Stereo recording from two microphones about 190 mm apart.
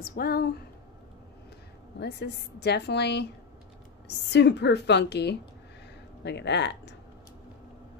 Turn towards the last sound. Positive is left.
turn(degrees=65)  # may be behind; listen again after turning